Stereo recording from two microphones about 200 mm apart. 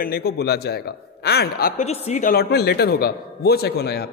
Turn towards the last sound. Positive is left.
turn(degrees=55)  # may be behind; listen again after turning